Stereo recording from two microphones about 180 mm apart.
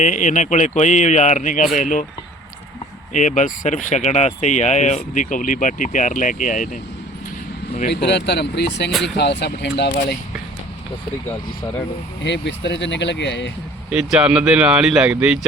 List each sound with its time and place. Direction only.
0.0 s speech: 45° left (ahead or behind)
3.1 s speech: 40° left (ahead or behind)
8.0 s speech: 70° left (ahead or behind)
8.9 s speech: centre (ahead or behind)
9.1 s speech: 70° left (ahead or behind)
12.2 s speech: 75° left (ahead or behind)
13.9 s speech: 5° right (ahead or behind)